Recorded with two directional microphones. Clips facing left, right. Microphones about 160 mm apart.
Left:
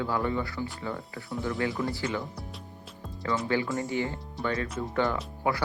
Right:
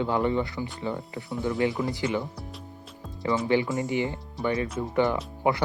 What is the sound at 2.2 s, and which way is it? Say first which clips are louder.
Speech: right 3 dB; centre (ahead or behind).